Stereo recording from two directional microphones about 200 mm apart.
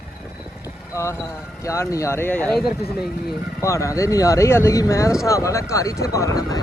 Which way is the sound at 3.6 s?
15° left (ahead or behind).